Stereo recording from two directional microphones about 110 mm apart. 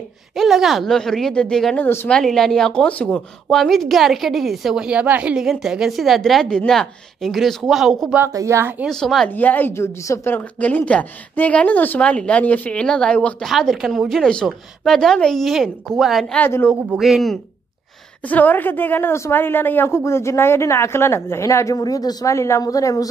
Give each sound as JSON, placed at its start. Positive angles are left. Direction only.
{"t": 0.4, "sound": "speech", "side_deg": -5}
{"t": 8.3, "sound": "speech", "side_deg": -30}
{"t": 8.8, "sound": "speech", "side_deg": 5}
{"t": 9.3, "sound": "a woman's voice", "side_deg": 15}
{"t": 16.3, "sound": "a woman's voice", "side_deg": 20}
{"t": 16.9, "sound": "speech", "side_deg": 0}
{"t": 18.3, "sound": "a woman's voice", "side_deg": 15}